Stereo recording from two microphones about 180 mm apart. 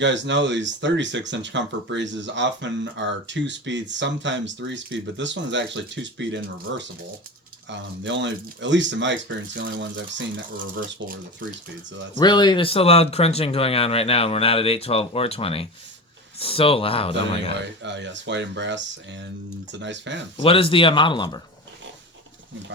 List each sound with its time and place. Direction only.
0.0 s speech: 85° right
9.6 s speech: 50° right (ahead or behind)
12.1 s speech: 25° left (ahead or behind)
17.8 s speech: 80° right
20.3 s speech: 30° left (ahead or behind)